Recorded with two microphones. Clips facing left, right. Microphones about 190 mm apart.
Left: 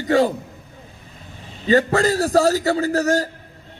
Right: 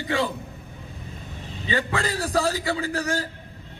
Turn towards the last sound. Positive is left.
turn(degrees=40)  # may be behind; listen again after turning